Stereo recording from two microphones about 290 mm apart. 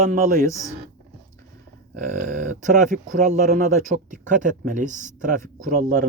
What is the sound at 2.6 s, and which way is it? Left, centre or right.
Speech, right.